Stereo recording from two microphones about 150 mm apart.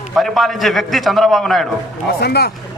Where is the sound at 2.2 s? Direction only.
90° left.